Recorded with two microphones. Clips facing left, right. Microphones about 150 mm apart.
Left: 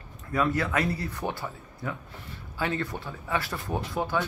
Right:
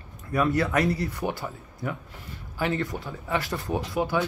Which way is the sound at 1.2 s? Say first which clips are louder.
Right 2 dB; 10° right (ahead or behind).